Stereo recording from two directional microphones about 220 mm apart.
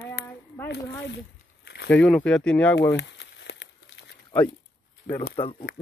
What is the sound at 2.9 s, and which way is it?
Crumpling, 55° left (ahead or behind).